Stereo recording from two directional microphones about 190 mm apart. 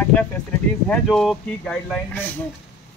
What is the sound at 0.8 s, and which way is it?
Speech, 5° left (ahead or behind).